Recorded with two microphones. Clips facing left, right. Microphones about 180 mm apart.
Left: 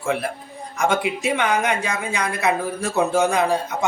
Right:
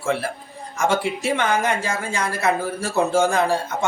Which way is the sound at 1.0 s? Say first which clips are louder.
Even; 15° left (ahead or behind).